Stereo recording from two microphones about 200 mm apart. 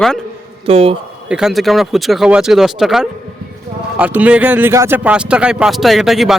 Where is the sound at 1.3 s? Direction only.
5° right (ahead or behind).